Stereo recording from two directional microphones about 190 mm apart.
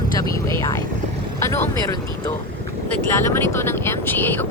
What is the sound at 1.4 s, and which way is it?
Speech, 15° left (ahead or behind).